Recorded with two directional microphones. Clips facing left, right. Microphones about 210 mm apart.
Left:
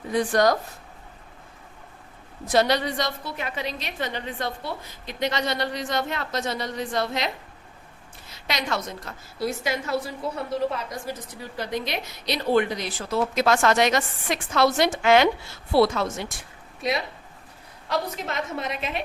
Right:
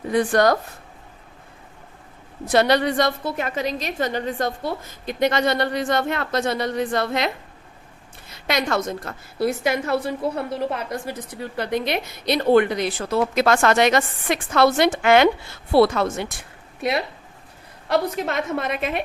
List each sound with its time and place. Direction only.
0.1 s a woman's voice: 60° right (ahead or behind)
2.5 s a woman's voice: 60° right (ahead or behind)
8.3 s a woman's voice: 55° right (ahead or behind)